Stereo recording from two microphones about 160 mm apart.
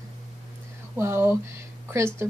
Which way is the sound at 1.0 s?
15° right (ahead or behind).